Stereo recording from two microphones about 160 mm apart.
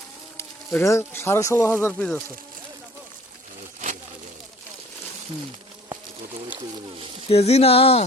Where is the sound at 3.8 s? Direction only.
50° right (ahead or behind).